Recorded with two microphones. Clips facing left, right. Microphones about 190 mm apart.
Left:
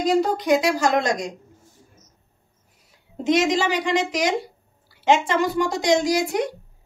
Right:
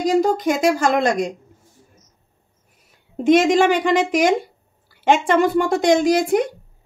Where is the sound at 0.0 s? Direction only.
50° right (ahead or behind).